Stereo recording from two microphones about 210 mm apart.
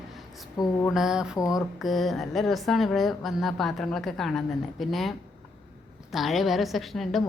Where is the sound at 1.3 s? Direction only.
15° left (ahead or behind).